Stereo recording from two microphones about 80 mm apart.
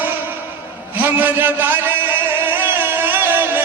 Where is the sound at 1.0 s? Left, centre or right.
Right.